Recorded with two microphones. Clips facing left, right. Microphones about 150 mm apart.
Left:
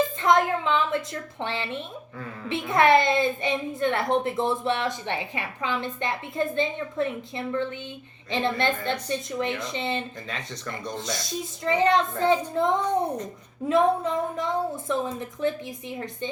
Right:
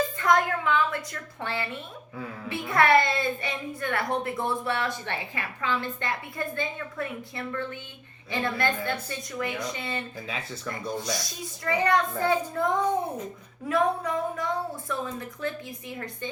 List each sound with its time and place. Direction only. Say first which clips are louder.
0.2 s a sound: left 1 dB; 25° left (ahead or behind)
2.5 s a woman's voice: left 2 dB; 20° left (ahead or behind)
10.3 s speech: right 2 dB; 5° right (ahead or behind)
11.6 s a woman's voice: left 3 dB; 20° left (ahead or behind)